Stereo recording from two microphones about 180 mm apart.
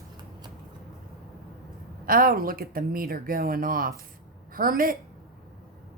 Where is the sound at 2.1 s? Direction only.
55° right (ahead or behind).